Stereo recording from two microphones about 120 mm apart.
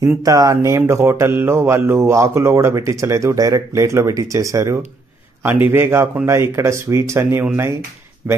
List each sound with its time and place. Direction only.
0.0 s speech: 30° right (ahead or behind); by 8.4 s 15° right (ahead or behind)